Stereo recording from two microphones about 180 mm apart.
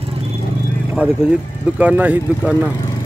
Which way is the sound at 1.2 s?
5° right (ahead or behind).